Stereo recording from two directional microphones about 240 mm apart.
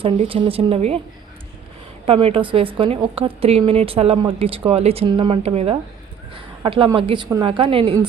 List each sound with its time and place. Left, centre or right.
0.0 s a woman's voice: right
2.0 s a woman's voice: right